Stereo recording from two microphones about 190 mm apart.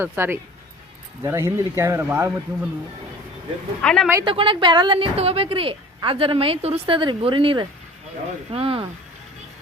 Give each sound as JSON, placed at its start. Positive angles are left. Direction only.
{"t": 0.0, "sound": "speech", "side_deg": -10}
{"t": 3.8, "sound": "speech", "side_deg": 5}
{"t": 4.1, "sound": "a woman's voice", "side_deg": -25}